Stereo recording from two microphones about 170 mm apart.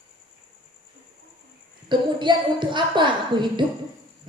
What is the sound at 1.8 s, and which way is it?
A woman's voice, 25° right (ahead or behind).